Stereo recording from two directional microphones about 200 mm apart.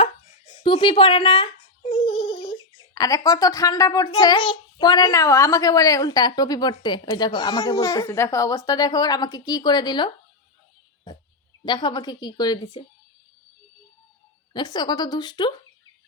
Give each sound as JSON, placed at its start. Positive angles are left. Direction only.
{"t": 0.5, "sound": "a child's voice", "side_deg": 25}
{"t": 11.6, "sound": "a child's voice", "side_deg": 20}
{"t": 14.5, "sound": "a child's voice", "side_deg": 20}